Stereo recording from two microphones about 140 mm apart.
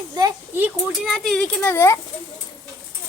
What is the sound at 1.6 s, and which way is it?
Speech, 15° left (ahead or behind).